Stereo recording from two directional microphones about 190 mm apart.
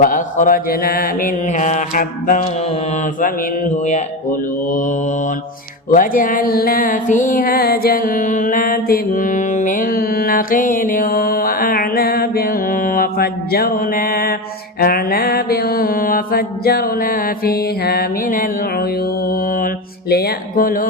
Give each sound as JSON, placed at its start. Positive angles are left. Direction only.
{"t": 0.0, "sound": "mantra", "side_deg": 45}
{"t": 5.9, "sound": "music", "side_deg": 45}
{"t": 14.8, "sound": "mantra", "side_deg": 50}